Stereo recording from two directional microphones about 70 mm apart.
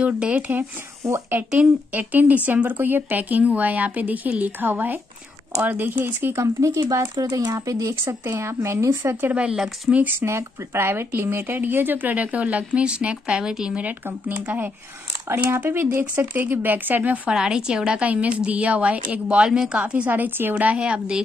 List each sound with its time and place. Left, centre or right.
0.0 s speech: centre
2.0 s speech: right
6.3 s speech: right
7.2 s speech: right
7.6 s speech: right
8.0 s speech: right
9.1 s a woman's voice: right
10.2 s speech: right
17.3 s a woman's voice: centre